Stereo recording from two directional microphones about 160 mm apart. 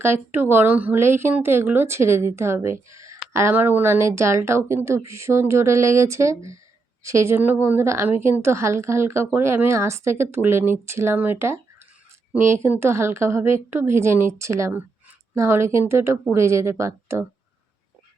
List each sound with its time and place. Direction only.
0.0 s speech: 15° right (ahead or behind)